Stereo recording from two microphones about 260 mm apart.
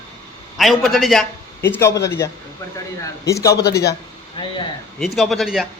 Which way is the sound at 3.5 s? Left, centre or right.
Left.